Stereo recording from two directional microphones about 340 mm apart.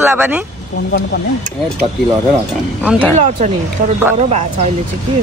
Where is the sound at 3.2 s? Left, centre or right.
Right.